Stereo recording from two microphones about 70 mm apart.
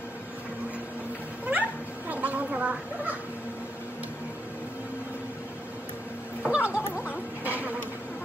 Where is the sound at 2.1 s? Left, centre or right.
Right.